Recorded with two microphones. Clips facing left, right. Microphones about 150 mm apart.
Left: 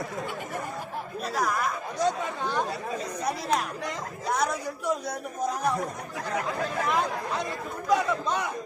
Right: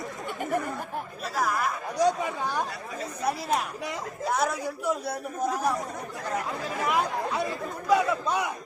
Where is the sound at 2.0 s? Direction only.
10° right (ahead or behind).